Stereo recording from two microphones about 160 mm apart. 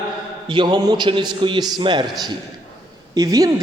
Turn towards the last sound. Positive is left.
turn(degrees=-25)  # may be behind; listen again after turning